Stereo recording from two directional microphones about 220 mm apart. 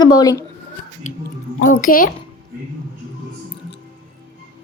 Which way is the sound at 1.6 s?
35° left (ahead or behind).